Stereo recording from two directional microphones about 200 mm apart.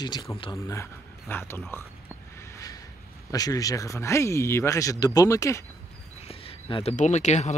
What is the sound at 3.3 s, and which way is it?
Speech, 20° left (ahead or behind).